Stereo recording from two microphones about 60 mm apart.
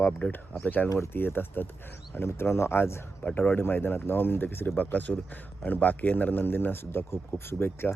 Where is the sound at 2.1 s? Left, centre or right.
Left.